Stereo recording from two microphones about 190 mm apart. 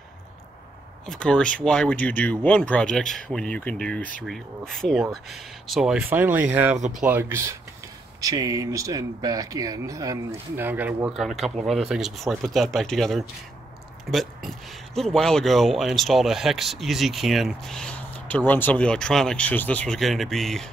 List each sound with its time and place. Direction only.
1.0 s speech: 5° left (ahead or behind)